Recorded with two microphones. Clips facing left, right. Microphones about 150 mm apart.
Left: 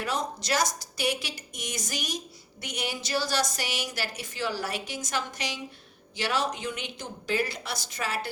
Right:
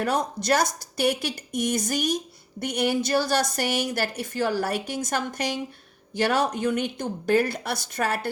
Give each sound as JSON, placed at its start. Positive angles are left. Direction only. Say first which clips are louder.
{"t": 0.0, "sound": "a woman's voice", "louder": "right 6 dB", "side_deg": -55}